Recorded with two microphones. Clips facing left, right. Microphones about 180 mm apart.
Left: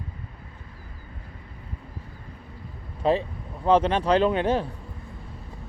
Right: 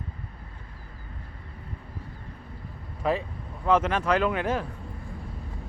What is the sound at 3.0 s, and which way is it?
Speech, 30° left (ahead or behind).